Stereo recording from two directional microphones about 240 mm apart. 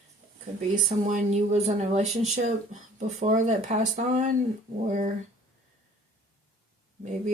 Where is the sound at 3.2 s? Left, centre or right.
Right.